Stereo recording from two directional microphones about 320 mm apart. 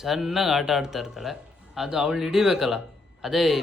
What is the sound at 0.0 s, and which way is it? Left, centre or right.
Speech, centre.